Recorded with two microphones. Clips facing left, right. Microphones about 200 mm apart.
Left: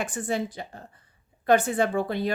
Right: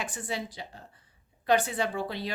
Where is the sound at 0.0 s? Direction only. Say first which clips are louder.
Left 7 dB; 50° left (ahead or behind).